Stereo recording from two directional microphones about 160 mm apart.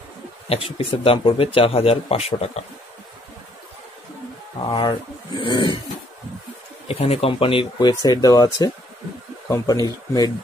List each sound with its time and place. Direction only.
0.5 s speech: 35° left (ahead or behind)
4.6 s speech: 25° left (ahead or behind)
6.9 s speech: 40° left (ahead or behind)